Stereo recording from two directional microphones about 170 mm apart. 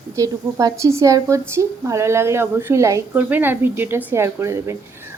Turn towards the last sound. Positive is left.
turn(degrees=-15)  # may be behind; listen again after turning